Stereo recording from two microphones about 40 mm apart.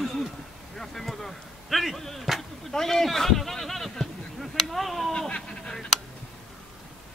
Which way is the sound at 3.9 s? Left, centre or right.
Centre.